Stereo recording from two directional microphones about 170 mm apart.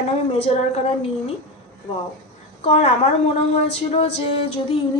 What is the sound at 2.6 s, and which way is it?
Speech, 35° left (ahead or behind).